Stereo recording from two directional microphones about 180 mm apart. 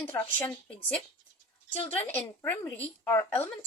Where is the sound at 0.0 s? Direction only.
10° left (ahead or behind).